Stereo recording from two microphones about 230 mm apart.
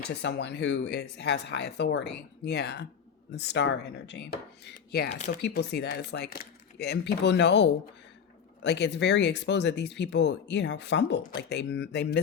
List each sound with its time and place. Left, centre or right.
0.1 s speech: left